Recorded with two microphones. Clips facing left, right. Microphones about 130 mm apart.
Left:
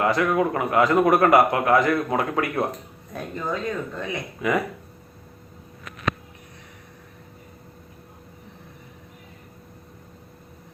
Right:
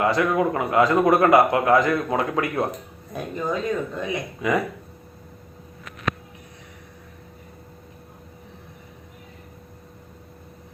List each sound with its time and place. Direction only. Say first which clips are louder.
0.0 s a man's voice: even; 25° right (ahead or behind)